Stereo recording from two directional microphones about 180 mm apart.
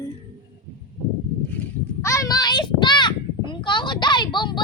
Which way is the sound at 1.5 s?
15° left (ahead or behind).